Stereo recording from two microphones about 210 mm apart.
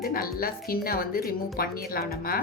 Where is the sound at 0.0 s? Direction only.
45° left (ahead or behind).